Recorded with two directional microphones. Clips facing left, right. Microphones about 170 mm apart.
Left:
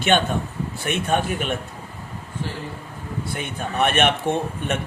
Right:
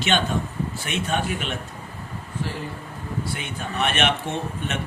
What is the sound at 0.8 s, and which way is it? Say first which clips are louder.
Speech: left 5 dB; 55° left (ahead or behind).